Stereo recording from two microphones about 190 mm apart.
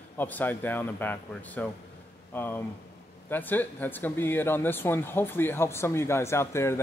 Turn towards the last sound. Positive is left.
turn(degrees=15)  # may be behind; listen again after turning